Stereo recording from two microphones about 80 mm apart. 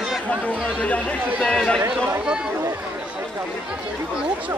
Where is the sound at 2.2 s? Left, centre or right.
Centre.